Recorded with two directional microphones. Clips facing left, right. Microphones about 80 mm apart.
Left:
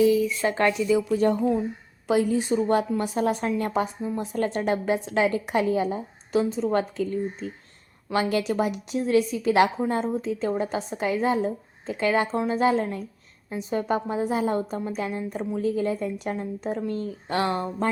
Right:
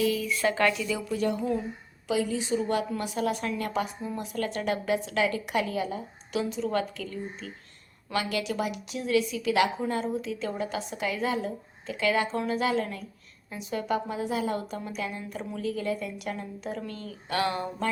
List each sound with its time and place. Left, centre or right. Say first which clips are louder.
0.0 s a woman's voice: left 6 dB; centre
2.0 s a woman's voice: left 5 dB; left